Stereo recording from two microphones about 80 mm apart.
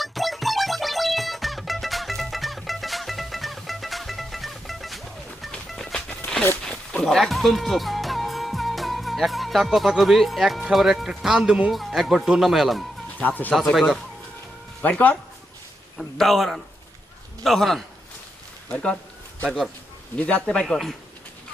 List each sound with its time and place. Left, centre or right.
0.0 s music: centre
6.7 s speech: centre
11.7 s speech: centre
13.1 s speech: left
14.8 s speech: centre
16.0 s speech: centre
18.7 s speech: centre
19.5 s speech: centre
20.1 s speech: centre